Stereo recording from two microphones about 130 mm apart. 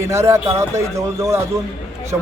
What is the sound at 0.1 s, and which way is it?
Speech, 20° right (ahead or behind).